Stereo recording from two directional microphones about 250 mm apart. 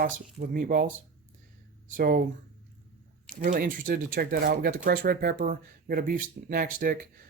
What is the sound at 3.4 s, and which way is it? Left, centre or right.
Speech, right.